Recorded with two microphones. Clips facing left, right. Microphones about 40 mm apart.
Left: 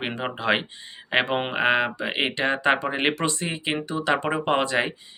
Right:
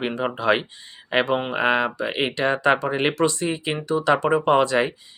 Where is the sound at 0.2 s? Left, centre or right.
Centre.